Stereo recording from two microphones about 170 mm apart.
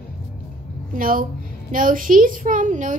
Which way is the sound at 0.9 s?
55° right (ahead or behind).